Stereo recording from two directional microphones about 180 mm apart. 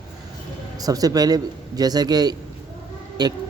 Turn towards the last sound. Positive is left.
turn(degrees=-20)  # may be behind; listen again after turning